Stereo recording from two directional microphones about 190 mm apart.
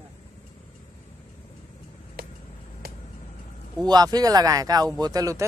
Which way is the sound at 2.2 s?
55° right (ahead or behind).